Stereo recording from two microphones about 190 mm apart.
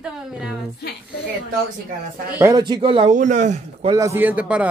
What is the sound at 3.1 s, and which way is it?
Speech, 40° right (ahead or behind).